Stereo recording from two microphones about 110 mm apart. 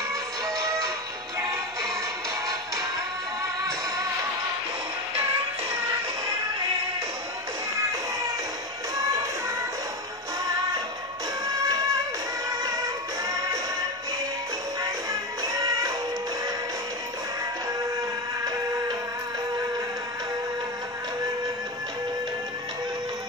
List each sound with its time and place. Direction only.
0.1 s music: 30° right (ahead or behind)
11.4 s music: 30° right (ahead or behind)
15.4 s music: 30° right (ahead or behind)